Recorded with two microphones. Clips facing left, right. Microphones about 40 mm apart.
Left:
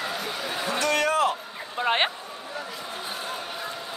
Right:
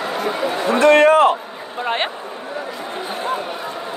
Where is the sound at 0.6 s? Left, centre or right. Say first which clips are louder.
Right 13 dB; right.